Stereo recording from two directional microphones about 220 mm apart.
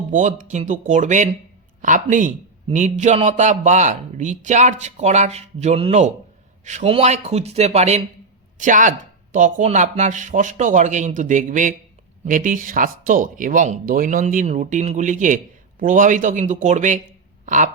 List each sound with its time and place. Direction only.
0.1 s speech: 35° right (ahead or behind)